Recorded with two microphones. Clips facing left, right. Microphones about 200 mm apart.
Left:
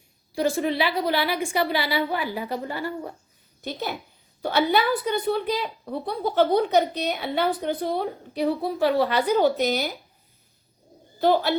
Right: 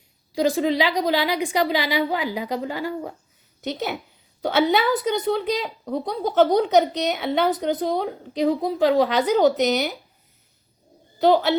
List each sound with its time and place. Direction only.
0.3 s a woman's voice: 15° right (ahead or behind)
11.2 s a woman's voice: 20° right (ahead or behind)